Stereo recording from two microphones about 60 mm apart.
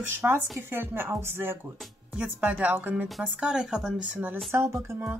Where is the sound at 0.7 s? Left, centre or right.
Right.